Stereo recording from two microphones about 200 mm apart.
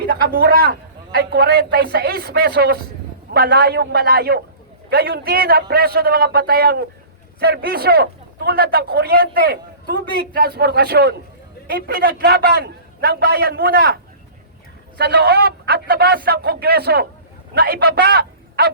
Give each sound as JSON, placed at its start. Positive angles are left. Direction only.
{"t": 0.1, "sound": "a man's voice", "side_deg": -55}